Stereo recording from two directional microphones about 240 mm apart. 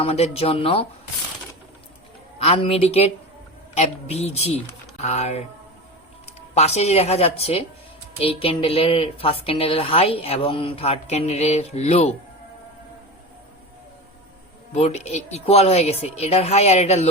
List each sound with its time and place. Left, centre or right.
0.0 s a woman's voice: left
2.4 s a woman's voice: left
14.7 s a woman's voice: left